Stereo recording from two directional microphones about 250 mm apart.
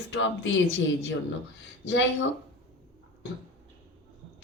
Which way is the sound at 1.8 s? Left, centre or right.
Left.